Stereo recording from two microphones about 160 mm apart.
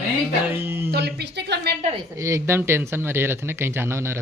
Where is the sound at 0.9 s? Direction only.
90° right.